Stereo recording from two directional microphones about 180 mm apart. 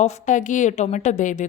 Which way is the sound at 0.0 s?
40° left (ahead or behind).